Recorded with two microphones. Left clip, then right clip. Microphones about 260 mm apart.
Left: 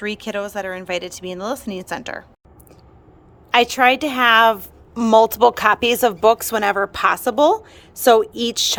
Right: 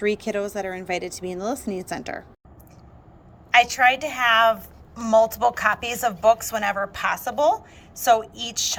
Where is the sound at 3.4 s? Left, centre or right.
Left.